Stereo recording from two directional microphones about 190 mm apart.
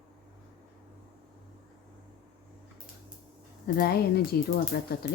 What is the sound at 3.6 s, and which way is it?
Speech, 55° left (ahead or behind).